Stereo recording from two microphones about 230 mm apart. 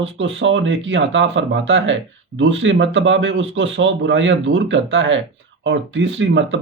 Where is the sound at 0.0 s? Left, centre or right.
Right.